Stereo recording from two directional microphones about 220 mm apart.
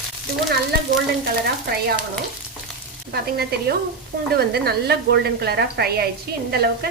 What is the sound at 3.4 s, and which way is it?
A woman's voice, 45° right (ahead or behind).